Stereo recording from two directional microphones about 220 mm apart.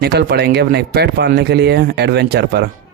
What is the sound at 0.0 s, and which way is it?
Speech, 45° right (ahead or behind).